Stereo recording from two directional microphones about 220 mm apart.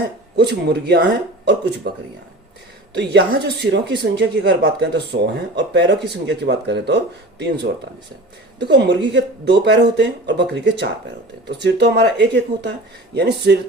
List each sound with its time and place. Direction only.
0.3 s a woman's voice: 45° right (ahead or behind)
3.0 s a woman's voice: 50° right (ahead or behind)
8.5 s a woman's voice: 50° right (ahead or behind)